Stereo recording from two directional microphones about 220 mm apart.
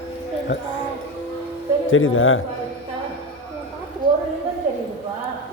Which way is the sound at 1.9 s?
65° left (ahead or behind).